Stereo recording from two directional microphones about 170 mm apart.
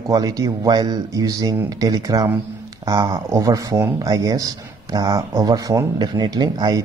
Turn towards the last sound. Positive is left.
turn(degrees=-20)  # may be behind; listen again after turning